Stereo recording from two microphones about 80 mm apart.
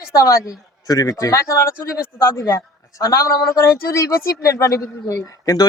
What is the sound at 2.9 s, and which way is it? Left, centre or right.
Speech, left.